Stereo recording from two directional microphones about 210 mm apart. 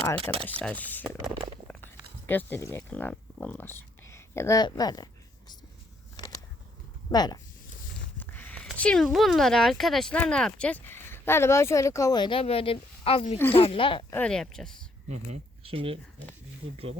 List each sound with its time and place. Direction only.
0.3 s speech: 10° left (ahead or behind)
2.2 s speech: 10° left (ahead or behind)
7.1 s speech: 20° left (ahead or behind)
8.2 s speech: 10° left (ahead or behind); by 14.0 s 25° left (ahead or behind)
14.1 s speech: 5° left (ahead or behind)
15.1 s speech: 30° right (ahead or behind)